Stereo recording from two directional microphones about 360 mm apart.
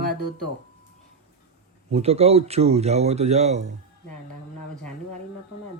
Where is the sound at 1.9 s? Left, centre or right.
Centre.